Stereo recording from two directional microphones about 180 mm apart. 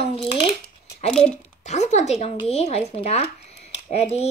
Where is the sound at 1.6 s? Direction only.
40° left (ahead or behind).